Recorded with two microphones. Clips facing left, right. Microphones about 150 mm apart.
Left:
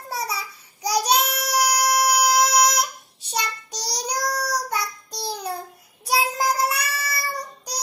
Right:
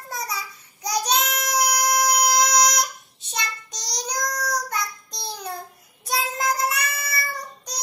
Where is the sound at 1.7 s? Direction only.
30° left (ahead or behind).